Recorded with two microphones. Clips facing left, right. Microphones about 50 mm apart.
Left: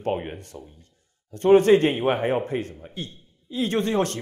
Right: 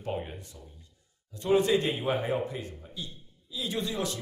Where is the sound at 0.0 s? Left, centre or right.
Left.